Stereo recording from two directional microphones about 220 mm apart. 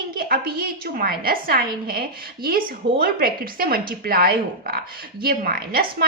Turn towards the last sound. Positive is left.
turn(degrees=-40)  # may be behind; listen again after turning